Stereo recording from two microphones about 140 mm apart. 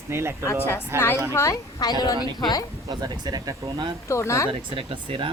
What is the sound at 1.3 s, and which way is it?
A woman's voice, 20° left (ahead or behind).